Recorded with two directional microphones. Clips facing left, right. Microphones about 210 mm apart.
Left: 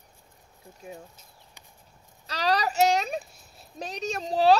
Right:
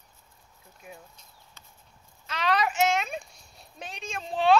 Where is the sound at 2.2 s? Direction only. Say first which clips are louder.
Left 1 dB; 35° left (ahead or behind).